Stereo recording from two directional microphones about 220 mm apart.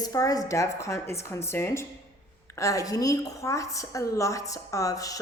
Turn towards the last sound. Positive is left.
turn(degrees=15)  # may be behind; listen again after turning